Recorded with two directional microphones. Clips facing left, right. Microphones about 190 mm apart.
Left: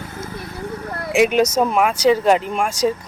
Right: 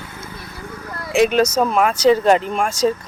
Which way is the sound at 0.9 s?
55° left (ahead or behind).